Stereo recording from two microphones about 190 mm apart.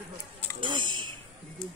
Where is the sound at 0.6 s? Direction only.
25° right (ahead or behind).